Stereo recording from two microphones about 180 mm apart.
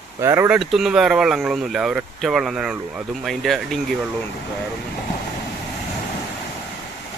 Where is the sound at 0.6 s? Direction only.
Centre (ahead or behind).